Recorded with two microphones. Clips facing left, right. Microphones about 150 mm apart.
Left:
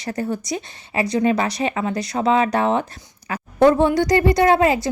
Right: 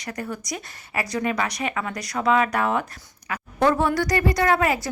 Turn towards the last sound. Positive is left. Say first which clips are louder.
# left 5 dB
turn(degrees=25)  # may be behind; listen again after turning